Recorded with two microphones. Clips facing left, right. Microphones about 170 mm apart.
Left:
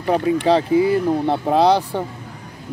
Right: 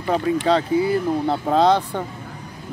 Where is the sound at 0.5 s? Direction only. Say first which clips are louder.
Left 3 dB; 15° left (ahead or behind).